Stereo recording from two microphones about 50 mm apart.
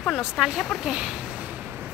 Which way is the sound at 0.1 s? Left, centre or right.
Centre.